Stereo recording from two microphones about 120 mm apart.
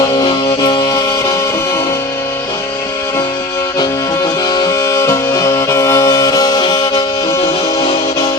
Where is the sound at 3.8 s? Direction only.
35° left (ahead or behind).